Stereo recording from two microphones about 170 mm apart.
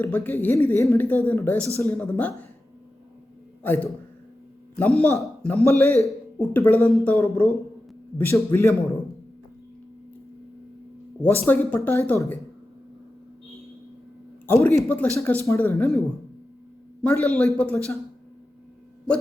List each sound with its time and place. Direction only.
0.0 s speech: 10° left (ahead or behind)
3.6 s a man's voice: 10° left (ahead or behind)
11.2 s speech: 10° left (ahead or behind)
14.4 s speech: 10° left (ahead or behind)
17.0 s speech: 5° left (ahead or behind)